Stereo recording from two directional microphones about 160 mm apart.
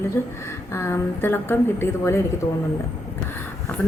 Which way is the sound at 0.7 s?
15° left (ahead or behind).